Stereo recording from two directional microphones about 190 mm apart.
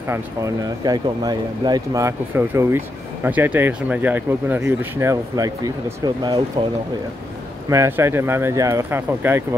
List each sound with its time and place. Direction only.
0.1 s speech: 20° right (ahead or behind)
7.7 s speech: 15° right (ahead or behind)